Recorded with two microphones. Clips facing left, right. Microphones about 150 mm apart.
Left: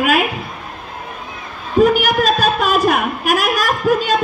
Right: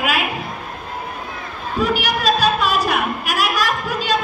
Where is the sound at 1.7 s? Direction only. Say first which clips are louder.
Left 8 dB; 50° left (ahead or behind).